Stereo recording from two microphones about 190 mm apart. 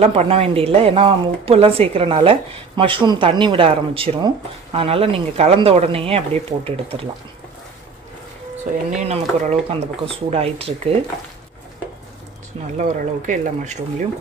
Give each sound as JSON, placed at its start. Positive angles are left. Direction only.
{"t": 0.0, "sound": "speech", "side_deg": -35}
{"t": 9.0, "sound": "speech", "side_deg": -35}
{"t": 12.7, "sound": "speech", "side_deg": -40}